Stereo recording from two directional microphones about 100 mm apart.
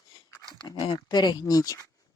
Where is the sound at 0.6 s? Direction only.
60° left (ahead or behind).